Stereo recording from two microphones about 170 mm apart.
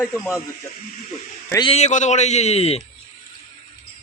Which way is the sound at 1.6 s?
40° left (ahead or behind).